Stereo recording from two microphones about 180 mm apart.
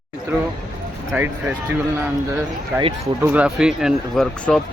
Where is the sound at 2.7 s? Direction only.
10° right (ahead or behind).